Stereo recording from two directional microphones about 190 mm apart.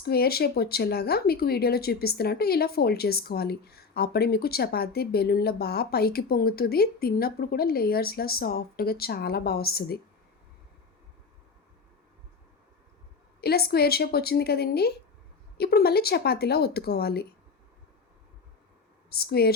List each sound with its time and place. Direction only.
0.0 s speech: 55° left (ahead or behind)
13.4 s speech: 55° left (ahead or behind)
19.1 s speech: 55° left (ahead or behind)